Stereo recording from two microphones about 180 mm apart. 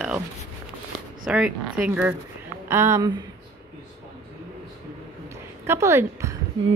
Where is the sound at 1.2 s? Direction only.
5° right (ahead or behind).